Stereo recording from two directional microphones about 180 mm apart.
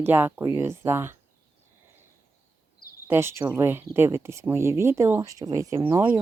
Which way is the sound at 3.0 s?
15° right (ahead or behind).